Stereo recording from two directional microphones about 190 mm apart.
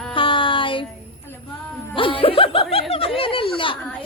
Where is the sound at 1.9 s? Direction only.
30° left (ahead or behind).